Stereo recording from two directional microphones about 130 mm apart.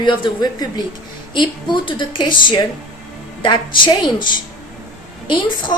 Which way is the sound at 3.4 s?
40° left (ahead or behind).